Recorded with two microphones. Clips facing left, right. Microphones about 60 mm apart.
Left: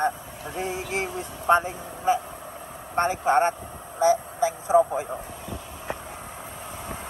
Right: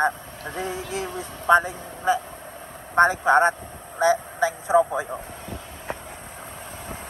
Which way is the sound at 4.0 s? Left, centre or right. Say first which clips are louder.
Right 1 dB; right.